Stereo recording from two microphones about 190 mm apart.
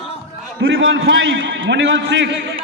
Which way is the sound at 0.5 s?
75° right (ahead or behind).